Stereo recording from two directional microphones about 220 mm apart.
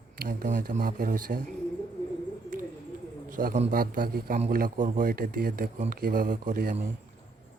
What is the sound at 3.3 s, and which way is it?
Speech, 35° right (ahead or behind).